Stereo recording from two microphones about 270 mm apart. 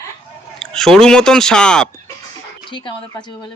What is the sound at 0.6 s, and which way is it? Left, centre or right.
Speech, centre.